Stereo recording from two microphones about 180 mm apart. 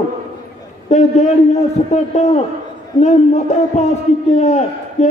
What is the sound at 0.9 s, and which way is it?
A man's voice, 40° left (ahead or behind).